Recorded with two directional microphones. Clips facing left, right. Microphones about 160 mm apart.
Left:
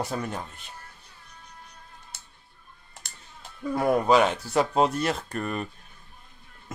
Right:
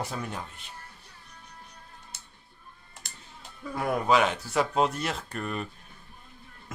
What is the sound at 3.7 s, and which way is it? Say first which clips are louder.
Speech: left 4 dB; 35° left (ahead or behind).